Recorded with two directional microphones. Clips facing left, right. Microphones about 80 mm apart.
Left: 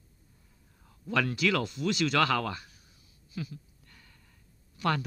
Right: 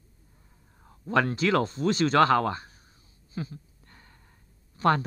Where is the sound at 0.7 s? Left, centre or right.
Right.